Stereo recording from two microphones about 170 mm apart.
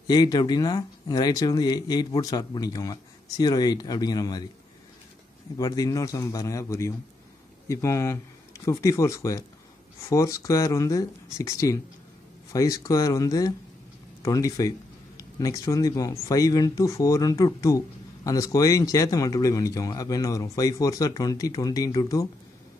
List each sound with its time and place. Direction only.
0.0 s speech: 25° left (ahead or behind)
5.6 s speech: 20° left (ahead or behind)